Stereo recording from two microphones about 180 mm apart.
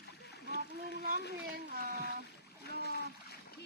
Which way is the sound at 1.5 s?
65° right (ahead or behind).